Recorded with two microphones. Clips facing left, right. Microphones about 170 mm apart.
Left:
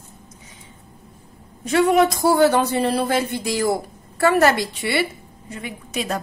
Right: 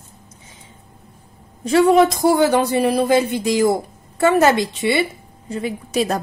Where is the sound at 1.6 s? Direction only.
30° right (ahead or behind).